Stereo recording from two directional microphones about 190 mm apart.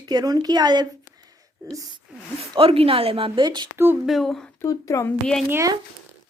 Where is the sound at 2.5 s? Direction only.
30° right (ahead or behind).